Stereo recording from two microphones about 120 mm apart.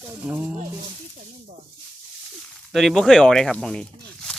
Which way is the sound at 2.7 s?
Centre (ahead or behind).